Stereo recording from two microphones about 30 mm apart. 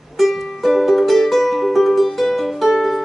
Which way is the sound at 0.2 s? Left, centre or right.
Centre.